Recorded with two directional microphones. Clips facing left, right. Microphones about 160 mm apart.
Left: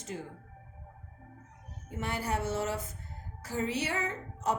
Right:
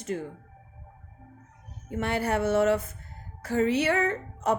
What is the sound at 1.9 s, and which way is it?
Speech, 65° right (ahead or behind).